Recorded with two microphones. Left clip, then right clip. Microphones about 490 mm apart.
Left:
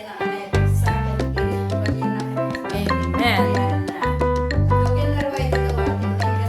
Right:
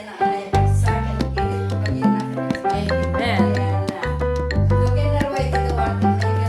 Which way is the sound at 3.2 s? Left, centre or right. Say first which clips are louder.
Left 4 dB; left.